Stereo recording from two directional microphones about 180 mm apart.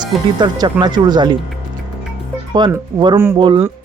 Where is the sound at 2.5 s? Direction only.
25° right (ahead or behind).